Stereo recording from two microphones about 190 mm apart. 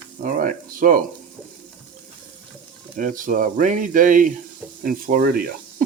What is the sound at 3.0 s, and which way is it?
Speech, 45° right (ahead or behind).